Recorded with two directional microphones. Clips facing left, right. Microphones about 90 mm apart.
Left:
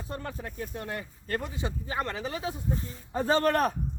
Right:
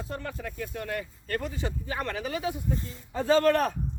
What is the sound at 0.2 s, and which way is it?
Speech, 30° left (ahead or behind).